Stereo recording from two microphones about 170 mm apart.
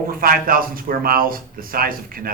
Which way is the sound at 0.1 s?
60° right (ahead or behind).